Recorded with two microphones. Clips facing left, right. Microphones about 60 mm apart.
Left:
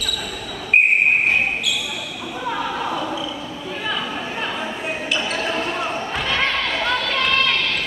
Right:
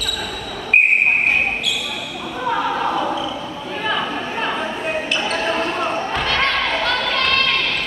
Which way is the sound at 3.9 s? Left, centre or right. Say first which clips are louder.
Right 5 dB; right.